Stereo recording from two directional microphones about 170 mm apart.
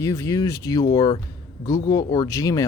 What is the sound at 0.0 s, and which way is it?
Speech, 15° left (ahead or behind).